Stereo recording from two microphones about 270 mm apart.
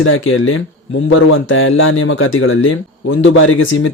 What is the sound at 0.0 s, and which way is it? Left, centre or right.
Speech, left.